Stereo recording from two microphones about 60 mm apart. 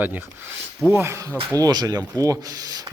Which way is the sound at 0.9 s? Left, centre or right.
Right.